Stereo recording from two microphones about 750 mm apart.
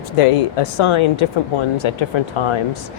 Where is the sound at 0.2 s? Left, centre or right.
Left.